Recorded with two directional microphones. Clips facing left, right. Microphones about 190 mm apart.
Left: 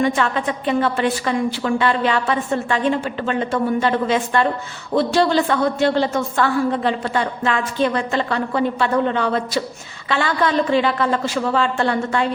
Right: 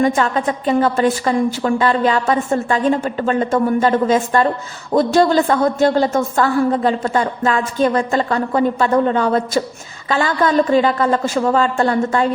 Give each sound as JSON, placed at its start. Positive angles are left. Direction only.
{"t": 0.0, "sound": "a woman's voice", "side_deg": -40}